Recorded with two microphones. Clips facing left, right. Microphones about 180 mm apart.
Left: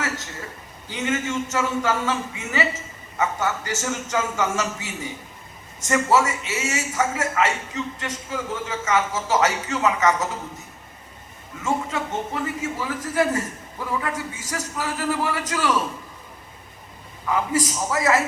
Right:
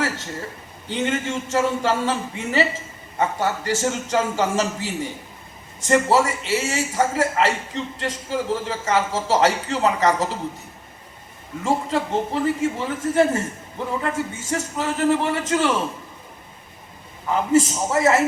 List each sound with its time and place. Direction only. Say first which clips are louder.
0.9 s a man's voice: right 1 dB; 30° right (ahead or behind)
11.6 s a man's voice: right 3 dB; 30° right (ahead or behind)
17.3 s a man's voice: right 5 dB; 25° right (ahead or behind)